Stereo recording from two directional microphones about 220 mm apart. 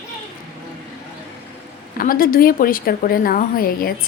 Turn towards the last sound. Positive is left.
turn(degrees=40)  # may be behind; listen again after turning